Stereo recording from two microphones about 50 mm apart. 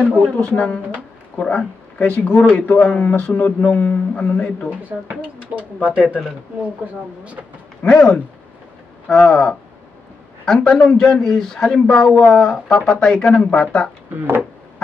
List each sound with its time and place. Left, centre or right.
0.0 s speech: left
2.0 s speech: left
5.1 s speech: right
7.8 s speech: centre
10.6 s speech: centre